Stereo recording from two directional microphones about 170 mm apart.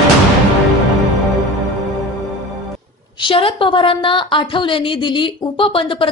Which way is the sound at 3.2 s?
30° left (ahead or behind).